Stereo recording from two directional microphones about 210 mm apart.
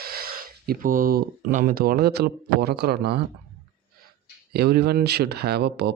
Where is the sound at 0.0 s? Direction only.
45° right (ahead or behind).